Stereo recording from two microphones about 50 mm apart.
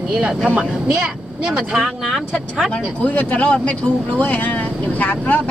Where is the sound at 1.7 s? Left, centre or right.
Centre.